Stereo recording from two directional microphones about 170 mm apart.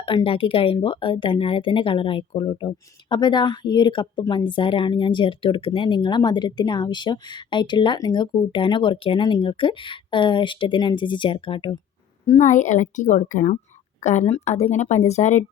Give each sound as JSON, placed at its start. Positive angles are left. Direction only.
{"t": 0.0, "sound": "speech", "side_deg": 30}
{"t": 12.2, "sound": "a woman's voice", "side_deg": 40}